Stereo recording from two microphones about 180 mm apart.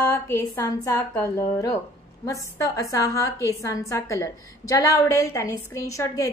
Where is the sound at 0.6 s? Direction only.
20° left (ahead or behind).